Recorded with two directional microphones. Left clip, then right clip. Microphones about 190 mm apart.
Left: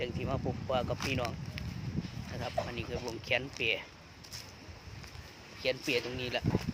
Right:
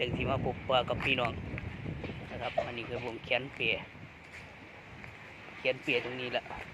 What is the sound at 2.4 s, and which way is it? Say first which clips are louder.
Speech: right 2 dB; 15° left (ahead or behind).